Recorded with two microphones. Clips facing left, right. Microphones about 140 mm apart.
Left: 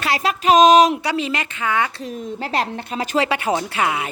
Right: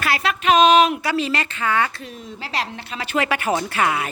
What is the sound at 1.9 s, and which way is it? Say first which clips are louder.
Speech: left 7 dB; 40° left (ahead or behind).